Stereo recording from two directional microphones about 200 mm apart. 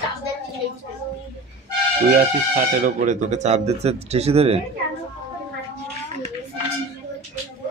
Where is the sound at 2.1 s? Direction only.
40° right (ahead or behind).